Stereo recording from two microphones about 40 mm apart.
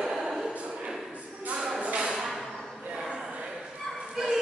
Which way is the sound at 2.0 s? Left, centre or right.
Centre.